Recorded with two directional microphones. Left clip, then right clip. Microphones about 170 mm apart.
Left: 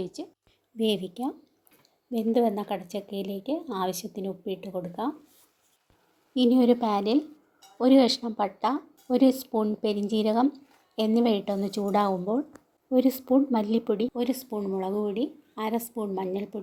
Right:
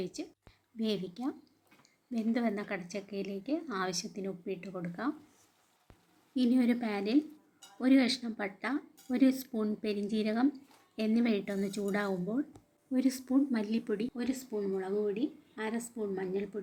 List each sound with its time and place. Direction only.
0.0 s a woman's voice: 15° left (ahead or behind)
6.3 s speech: 15° left (ahead or behind)
14.8 s speech: 40° left (ahead or behind)